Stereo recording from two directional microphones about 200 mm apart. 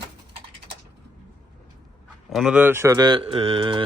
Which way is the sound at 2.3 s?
Centre (ahead or behind).